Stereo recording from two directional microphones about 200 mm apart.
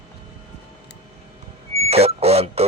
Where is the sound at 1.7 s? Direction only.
30° right (ahead or behind).